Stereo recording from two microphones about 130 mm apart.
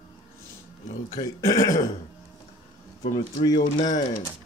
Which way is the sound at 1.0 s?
30° left (ahead or behind).